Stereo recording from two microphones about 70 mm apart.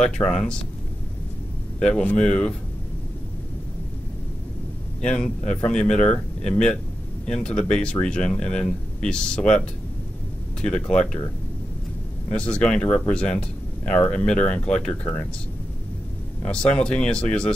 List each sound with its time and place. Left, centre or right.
0.0 s speech: centre
1.8 s speech: centre
5.0 s speech: centre
12.3 s speech: centre
16.4 s speech: centre